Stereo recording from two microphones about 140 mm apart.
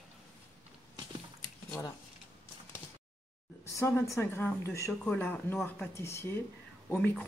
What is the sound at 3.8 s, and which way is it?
A woman's voice, 15° left (ahead or behind).